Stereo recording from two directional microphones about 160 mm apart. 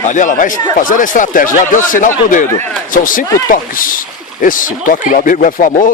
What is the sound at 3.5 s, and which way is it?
Speech, 60° left (ahead or behind).